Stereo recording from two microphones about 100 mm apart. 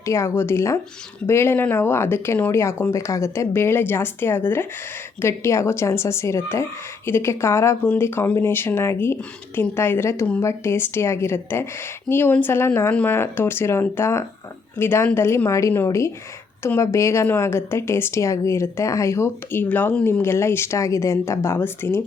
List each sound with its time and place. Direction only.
0.0 s a woman's voice: 30° left (ahead or behind); by 20.1 s 15° left (ahead or behind)
20.1 s speech: 25° left (ahead or behind)